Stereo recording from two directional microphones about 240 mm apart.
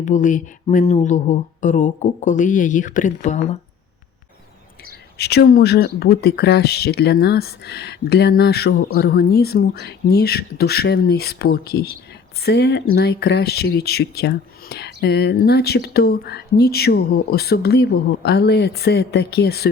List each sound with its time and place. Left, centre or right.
0.0 s speech: left
5.1 s speech: left